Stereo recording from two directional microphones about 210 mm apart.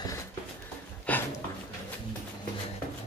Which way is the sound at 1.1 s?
5° left (ahead or behind).